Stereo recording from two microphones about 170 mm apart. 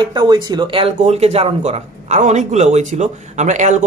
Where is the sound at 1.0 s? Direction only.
40° right (ahead or behind).